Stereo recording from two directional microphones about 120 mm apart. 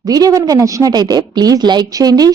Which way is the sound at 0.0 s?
30° right (ahead or behind).